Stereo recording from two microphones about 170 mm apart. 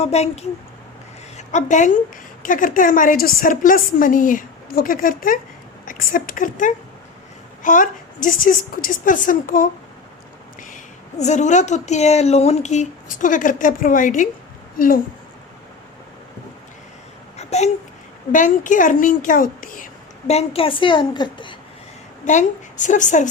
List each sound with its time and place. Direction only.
0.0 s a woman's voice: 40° left (ahead or behind)
11.2 s a woman's voice: 45° left (ahead or behind)
17.3 s babbling: 40° left (ahead or behind)
18.3 s speech: 50° left (ahead or behind); by 21.5 s 30° left (ahead or behind)
22.3 s speech: 45° left (ahead or behind)